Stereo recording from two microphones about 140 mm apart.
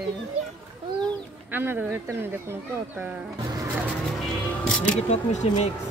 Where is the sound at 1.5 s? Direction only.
15° right (ahead or behind).